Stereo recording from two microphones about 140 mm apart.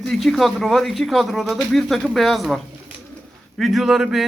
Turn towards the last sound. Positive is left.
turn(degrees=-5)  # may be behind; listen again after turning